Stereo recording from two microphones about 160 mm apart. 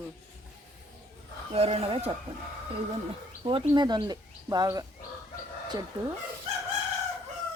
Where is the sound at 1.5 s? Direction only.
40° right (ahead or behind).